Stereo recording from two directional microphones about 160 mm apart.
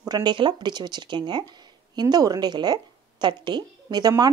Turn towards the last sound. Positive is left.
turn(degrees=-25)  # may be behind; listen again after turning